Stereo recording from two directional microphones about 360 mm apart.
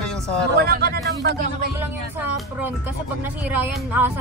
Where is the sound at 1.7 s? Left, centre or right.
Centre.